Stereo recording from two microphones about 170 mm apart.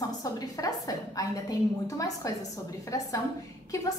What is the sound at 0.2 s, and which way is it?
A woman's voice, 20° left (ahead or behind).